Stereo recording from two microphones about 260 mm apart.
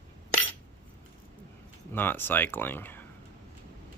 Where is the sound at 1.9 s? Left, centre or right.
Centre.